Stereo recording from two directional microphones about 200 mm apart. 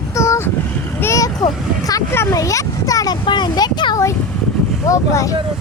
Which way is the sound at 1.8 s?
15° left (ahead or behind).